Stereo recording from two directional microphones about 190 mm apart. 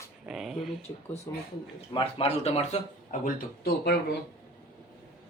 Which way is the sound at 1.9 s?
30° left (ahead or behind).